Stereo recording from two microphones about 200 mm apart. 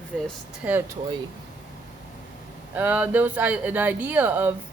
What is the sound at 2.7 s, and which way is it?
Speech, 10° right (ahead or behind).